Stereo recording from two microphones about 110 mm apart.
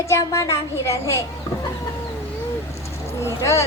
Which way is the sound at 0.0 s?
30° left (ahead or behind).